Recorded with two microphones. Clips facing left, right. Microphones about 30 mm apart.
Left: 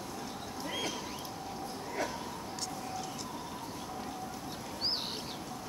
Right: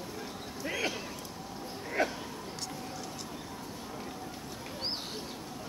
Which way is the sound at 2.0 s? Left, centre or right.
Right.